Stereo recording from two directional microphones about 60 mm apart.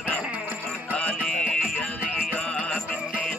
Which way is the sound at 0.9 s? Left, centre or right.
Centre.